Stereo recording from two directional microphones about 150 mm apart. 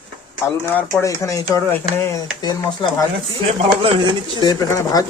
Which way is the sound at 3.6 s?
40° right (ahead or behind).